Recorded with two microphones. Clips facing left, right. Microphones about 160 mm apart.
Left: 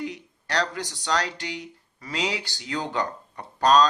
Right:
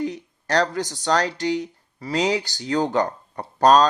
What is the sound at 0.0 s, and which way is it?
Speech, 40° right (ahead or behind).